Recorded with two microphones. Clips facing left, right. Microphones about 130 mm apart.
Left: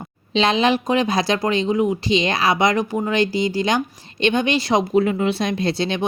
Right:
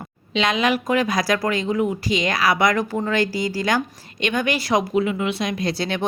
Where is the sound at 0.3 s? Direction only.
30° left (ahead or behind).